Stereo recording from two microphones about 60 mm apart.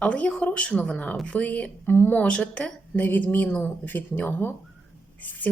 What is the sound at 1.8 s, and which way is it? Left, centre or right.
Speech, left.